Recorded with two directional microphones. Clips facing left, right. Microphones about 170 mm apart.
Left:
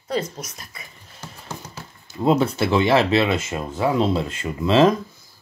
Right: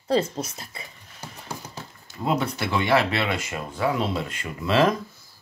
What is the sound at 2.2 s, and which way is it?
Speech, 25° left (ahead or behind).